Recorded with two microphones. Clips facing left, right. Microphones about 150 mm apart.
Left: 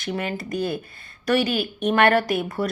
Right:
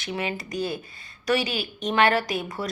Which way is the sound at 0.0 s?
50° left (ahead or behind).